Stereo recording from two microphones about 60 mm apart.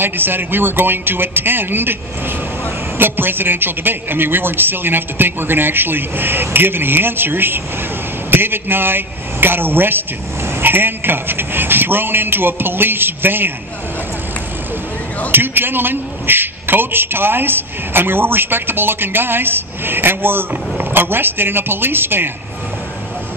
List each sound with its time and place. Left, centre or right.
0.0 s a man's voice: right
3.0 s a man's voice: right
15.3 s a man's voice: right